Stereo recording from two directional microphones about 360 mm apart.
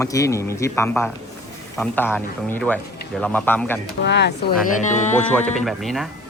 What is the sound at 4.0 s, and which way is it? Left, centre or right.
Speech, left.